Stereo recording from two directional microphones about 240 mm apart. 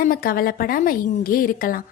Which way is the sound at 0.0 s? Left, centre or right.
Left.